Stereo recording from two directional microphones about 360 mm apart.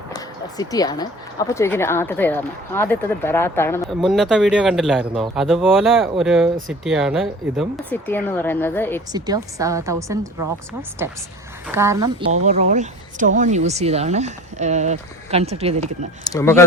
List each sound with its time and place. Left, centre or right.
0.1 s speech: centre
9.1 s speech: centre
11.7 s a woman's voice: centre
16.2 s speech: centre